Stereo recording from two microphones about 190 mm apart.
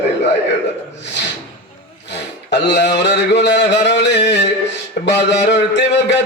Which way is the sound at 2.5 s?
65° left (ahead or behind).